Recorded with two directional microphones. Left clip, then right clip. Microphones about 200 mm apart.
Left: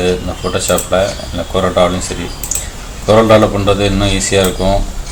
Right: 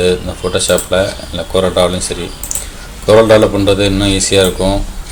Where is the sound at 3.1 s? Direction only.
40° right (ahead or behind).